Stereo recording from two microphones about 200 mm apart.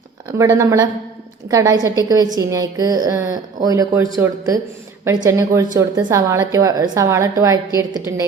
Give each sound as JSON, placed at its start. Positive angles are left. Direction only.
{"t": 0.3, "sound": "a woman's voice", "side_deg": -15}